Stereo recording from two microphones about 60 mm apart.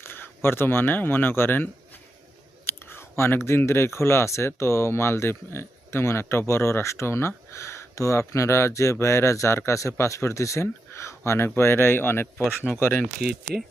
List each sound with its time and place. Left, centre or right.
0.0 s speech: left
2.6 s speech: left